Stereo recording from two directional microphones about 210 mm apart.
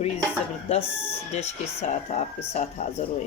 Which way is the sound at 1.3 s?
30° left (ahead or behind).